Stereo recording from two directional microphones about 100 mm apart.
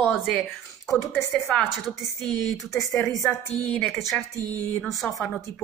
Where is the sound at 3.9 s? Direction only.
Centre (ahead or behind).